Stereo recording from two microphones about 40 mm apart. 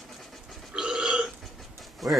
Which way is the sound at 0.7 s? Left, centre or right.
Centre.